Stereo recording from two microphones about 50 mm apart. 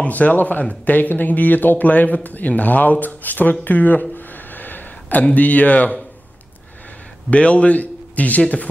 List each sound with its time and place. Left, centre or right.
0.0 s speech: left
3.6 s a sound: left
5.3 s speech: left
7.2 s a man's voice: left